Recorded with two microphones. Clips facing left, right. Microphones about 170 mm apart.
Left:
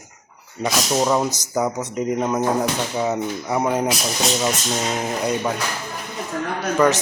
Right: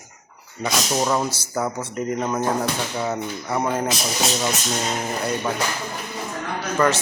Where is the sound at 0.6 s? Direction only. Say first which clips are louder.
Left 2 dB; 10° left (ahead or behind).